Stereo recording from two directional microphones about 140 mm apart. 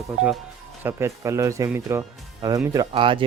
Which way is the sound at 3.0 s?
35° right (ahead or behind).